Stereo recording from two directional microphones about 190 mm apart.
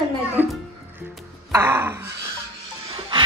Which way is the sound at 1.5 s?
10° right (ahead or behind).